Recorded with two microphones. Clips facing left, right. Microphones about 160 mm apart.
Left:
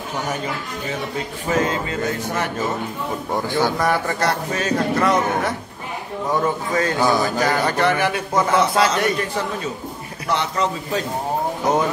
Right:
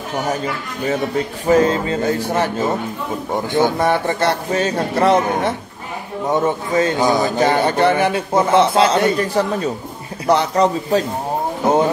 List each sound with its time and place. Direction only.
1.5 s speech: 30° right (ahead or behind)